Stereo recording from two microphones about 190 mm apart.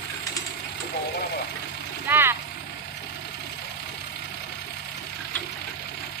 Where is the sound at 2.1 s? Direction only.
10° right (ahead or behind).